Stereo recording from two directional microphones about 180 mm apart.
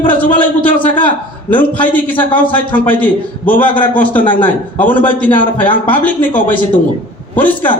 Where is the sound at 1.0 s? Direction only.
10° left (ahead or behind).